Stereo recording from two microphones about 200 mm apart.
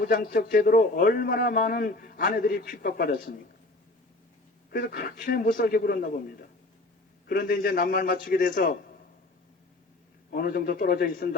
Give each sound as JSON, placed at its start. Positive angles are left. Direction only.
{"t": 0.0, "sound": "a man's voice", "side_deg": 45}
{"t": 4.7, "sound": "a man's voice", "side_deg": 45}
{"t": 7.3, "sound": "a man's voice", "side_deg": 45}
{"t": 10.3, "sound": "a man's voice", "side_deg": 50}